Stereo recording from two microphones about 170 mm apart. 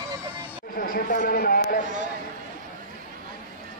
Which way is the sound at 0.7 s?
55° left (ahead or behind).